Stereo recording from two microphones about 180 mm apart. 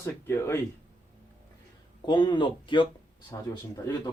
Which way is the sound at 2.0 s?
25° left (ahead or behind).